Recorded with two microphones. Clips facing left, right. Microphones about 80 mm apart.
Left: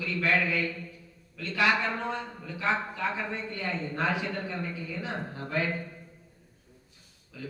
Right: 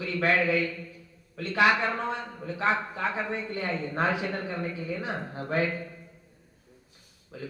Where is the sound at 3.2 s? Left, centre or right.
Right.